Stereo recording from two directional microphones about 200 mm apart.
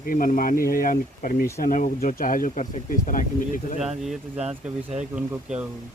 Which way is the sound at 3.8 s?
Centre (ahead or behind).